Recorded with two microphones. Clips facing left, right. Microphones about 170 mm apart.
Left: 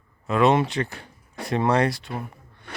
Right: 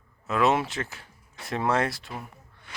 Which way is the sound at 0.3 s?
5° right (ahead or behind).